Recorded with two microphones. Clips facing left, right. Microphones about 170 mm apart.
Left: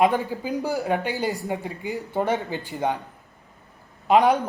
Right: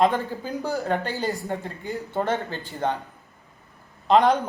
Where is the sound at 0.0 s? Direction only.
15° left (ahead or behind).